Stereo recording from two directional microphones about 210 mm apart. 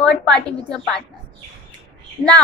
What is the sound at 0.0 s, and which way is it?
Speech, 5° left (ahead or behind).